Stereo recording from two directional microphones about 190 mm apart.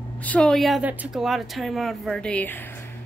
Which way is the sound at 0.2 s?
5° left (ahead or behind).